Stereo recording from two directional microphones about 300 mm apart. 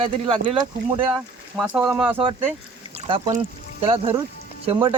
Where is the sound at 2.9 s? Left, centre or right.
Centre.